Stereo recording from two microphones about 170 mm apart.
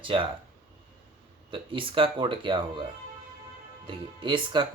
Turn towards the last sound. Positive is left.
turn(degrees=-30)  # may be behind; listen again after turning